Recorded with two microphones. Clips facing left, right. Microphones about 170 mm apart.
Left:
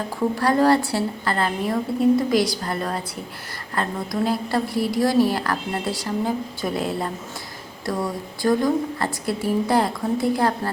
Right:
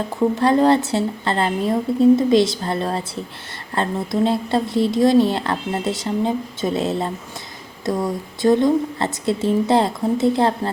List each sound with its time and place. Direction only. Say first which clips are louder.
0.3 s a woman's voice: right 2 dB; 20° right (ahead or behind)